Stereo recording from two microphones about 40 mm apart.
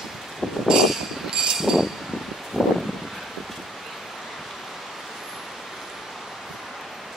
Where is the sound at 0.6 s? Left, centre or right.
Centre.